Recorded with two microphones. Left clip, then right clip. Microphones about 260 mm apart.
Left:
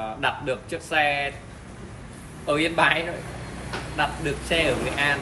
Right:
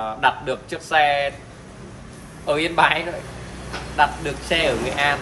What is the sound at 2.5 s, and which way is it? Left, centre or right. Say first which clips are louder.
Speech: right 3 dB; centre.